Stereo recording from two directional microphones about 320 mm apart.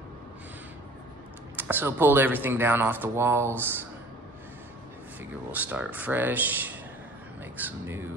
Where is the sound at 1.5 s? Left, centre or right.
Centre.